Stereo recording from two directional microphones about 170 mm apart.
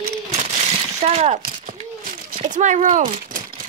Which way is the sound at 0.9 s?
40° right (ahead or behind).